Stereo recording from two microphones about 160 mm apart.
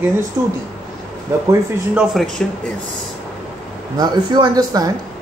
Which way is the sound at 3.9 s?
25° right (ahead or behind).